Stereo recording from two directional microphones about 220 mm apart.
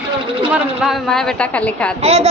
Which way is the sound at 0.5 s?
Centre (ahead or behind).